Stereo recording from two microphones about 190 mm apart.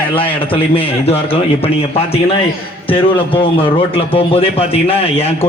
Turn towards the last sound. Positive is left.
turn(degrees=30)  # may be behind; listen again after turning